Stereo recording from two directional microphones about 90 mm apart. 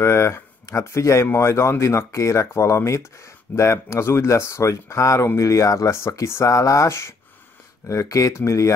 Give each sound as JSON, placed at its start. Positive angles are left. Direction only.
{"t": 0.0, "sound": "speech", "side_deg": 30}